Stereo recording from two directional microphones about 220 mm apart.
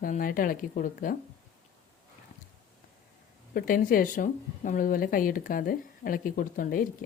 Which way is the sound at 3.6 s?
40° left (ahead or behind).